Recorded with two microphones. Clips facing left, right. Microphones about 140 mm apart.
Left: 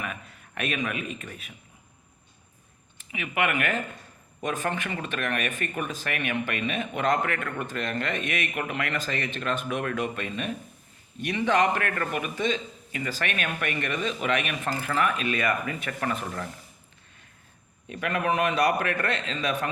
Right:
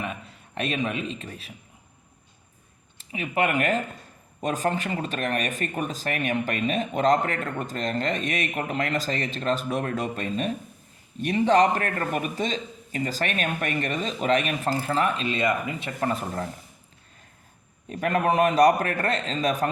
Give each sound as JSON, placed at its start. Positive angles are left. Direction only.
{"t": 0.0, "sound": "a man's voice", "side_deg": -30}
{"t": 3.0, "sound": "speech", "side_deg": -35}
{"t": 17.8, "sound": "speech", "side_deg": -35}